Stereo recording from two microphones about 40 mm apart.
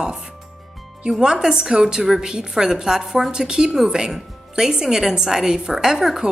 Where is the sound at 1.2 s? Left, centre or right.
Right.